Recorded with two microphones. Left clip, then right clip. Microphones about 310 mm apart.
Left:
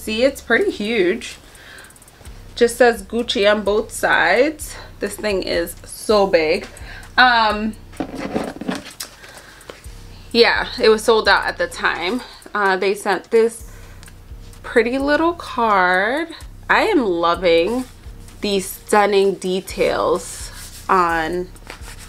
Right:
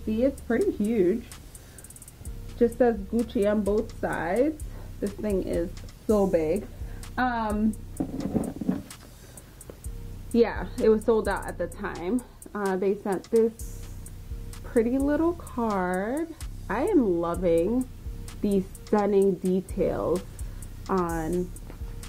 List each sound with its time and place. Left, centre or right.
0.1 s speech: centre
2.6 s speech: centre
6.3 s a sound: centre
10.3 s speech: centre
14.6 s a woman's voice: centre
20.0 s speech: centre